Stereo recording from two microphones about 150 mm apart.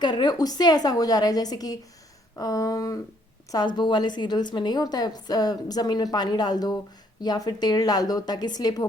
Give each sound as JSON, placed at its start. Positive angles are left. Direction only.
{"t": 0.0, "sound": "a woman's voice", "side_deg": 30}